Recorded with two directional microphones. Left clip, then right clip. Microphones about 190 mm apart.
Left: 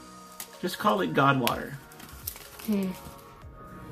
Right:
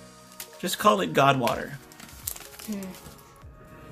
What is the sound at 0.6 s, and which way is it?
Speech, 40° right (ahead or behind).